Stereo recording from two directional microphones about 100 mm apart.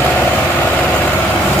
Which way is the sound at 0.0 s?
15° left (ahead or behind).